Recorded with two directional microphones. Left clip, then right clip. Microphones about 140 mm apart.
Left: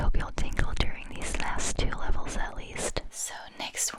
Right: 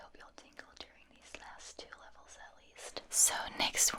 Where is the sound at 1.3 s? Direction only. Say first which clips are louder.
Left 17 dB; 60° left (ahead or behind).